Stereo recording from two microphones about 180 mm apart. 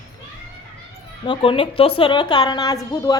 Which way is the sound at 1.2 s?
30° left (ahead or behind).